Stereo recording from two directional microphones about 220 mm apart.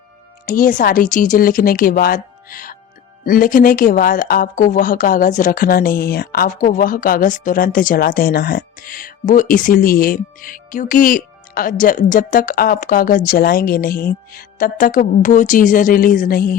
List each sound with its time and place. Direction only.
0.4 s speech: 40° left (ahead or behind)